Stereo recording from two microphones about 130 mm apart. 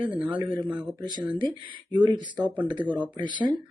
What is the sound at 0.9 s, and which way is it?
Speech, 35° right (ahead or behind).